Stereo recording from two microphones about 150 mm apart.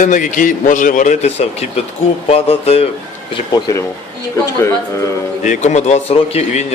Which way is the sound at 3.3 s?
30° left (ahead or behind).